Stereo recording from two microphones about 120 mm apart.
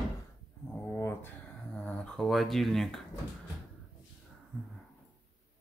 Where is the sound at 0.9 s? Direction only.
20° left (ahead or behind).